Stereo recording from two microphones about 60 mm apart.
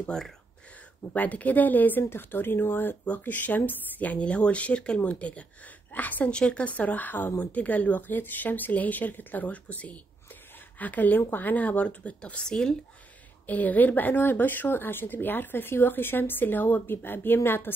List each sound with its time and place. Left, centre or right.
0.1 s speech: centre
1.1 s speech: left
6.3 s speech: centre
6.7 s speech: left; by 12.7 s centre
13.5 s speech: left